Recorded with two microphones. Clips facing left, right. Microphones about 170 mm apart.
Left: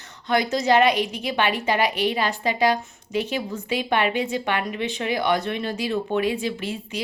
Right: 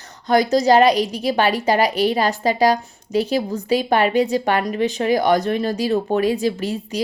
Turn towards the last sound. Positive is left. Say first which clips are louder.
# right 6 dB
turn(degrees=-40)  # may be behind; listen again after turning